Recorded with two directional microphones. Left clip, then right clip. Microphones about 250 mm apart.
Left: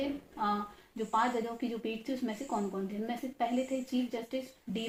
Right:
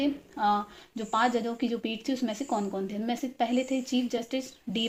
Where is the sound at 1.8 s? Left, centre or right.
Right.